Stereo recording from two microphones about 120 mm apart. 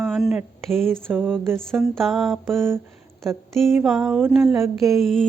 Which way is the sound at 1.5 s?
Centre (ahead or behind).